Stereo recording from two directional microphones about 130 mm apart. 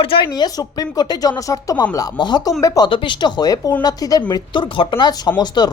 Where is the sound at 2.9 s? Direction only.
40° left (ahead or behind).